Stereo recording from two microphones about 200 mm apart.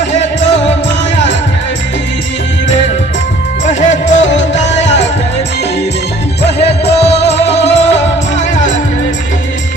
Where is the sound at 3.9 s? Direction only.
35° left (ahead or behind).